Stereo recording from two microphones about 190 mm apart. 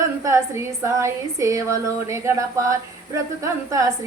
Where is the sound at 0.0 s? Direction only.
15° right (ahead or behind).